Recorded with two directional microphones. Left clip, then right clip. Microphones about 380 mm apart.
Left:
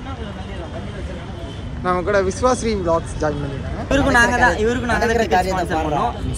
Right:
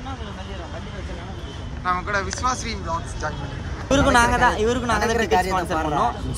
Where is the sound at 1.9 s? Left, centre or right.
Centre.